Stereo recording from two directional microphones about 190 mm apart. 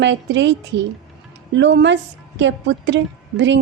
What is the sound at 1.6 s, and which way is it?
A woman's voice, 65° right (ahead or behind).